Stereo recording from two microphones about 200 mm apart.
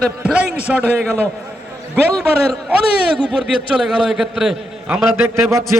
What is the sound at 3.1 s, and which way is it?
A man's voice, 5° right (ahead or behind).